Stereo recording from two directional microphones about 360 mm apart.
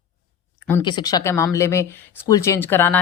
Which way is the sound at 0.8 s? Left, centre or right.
Centre.